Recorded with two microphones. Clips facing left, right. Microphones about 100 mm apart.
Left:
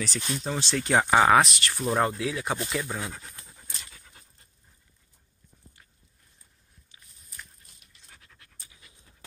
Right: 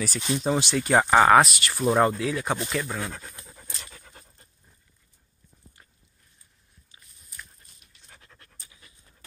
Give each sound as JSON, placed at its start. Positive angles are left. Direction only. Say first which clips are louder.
{"t": 0.0, "sound": "speech", "louder": "right 5 dB", "side_deg": -10}
{"t": 0.8, "sound": "speech", "louder": "right 2 dB", "side_deg": 0}
{"t": 2.8, "sound": "speech", "louder": "right 2 dB", "side_deg": 15}
{"t": 3.8, "sound": "dog", "louder": "right 4 dB", "side_deg": -55}
{"t": 8.2, "sound": "pant", "louder": "right 2 dB", "side_deg": -40}